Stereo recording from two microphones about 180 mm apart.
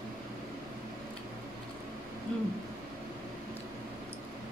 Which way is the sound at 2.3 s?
5° left (ahead or behind).